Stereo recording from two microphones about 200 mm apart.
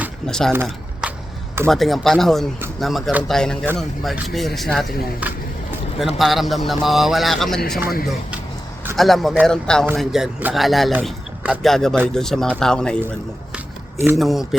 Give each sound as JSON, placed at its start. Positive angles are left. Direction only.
{"t": 0.3, "sound": "a man's voice", "side_deg": 5}
{"t": 0.5, "sound": "a sound", "side_deg": -10}
{"t": 1.6, "sound": "a man's voice", "side_deg": 0}
{"t": 7.8, "sound": "speech", "side_deg": 50}
{"t": 9.0, "sound": "a man's voice", "side_deg": 0}
{"t": 14.2, "sound": "a man's voice", "side_deg": 0}